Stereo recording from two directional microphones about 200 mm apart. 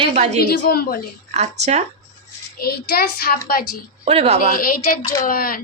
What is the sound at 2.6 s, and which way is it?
A woman's voice, 50° left (ahead or behind).